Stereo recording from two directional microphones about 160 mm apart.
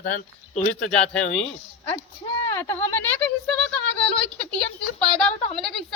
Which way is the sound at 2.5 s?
15° left (ahead or behind).